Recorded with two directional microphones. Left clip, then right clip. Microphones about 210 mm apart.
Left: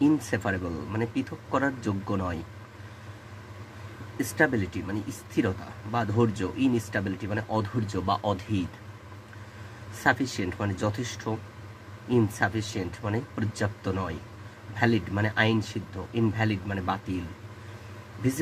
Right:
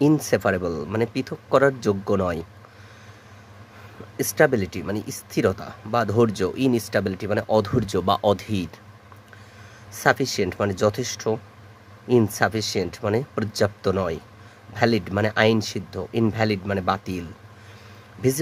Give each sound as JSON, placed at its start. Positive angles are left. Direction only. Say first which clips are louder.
{"t": 0.0, "sound": "speech", "louder": "right 6 dB", "side_deg": -45}
{"t": 4.2, "sound": "speech", "louder": "right 6 dB", "side_deg": -45}
{"t": 10.0, "sound": "speech", "louder": "right 5 dB", "side_deg": -45}